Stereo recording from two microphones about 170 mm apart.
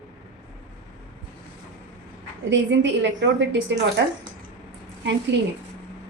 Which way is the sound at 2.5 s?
90° right.